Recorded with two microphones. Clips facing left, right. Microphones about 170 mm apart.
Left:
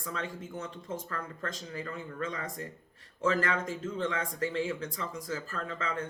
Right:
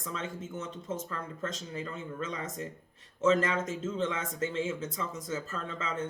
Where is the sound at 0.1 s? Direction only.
20° right (ahead or behind).